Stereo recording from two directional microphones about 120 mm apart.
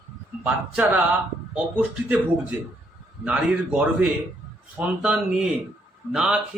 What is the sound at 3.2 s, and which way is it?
A man's voice, 10° right (ahead or behind).